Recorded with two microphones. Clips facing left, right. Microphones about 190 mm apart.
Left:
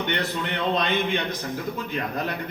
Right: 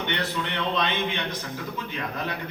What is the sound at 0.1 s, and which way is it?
A man's voice, 45° left (ahead or behind).